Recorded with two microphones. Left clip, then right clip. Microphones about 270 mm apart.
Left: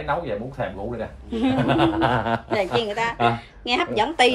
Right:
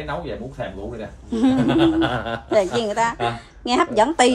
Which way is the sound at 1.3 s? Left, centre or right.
Centre.